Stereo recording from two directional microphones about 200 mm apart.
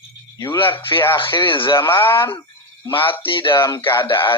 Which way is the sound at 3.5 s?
15° left (ahead or behind).